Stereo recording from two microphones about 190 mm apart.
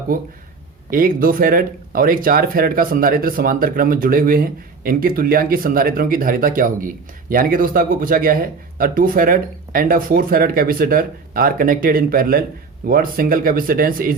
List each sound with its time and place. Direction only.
0.1 s speech: 45° right (ahead or behind)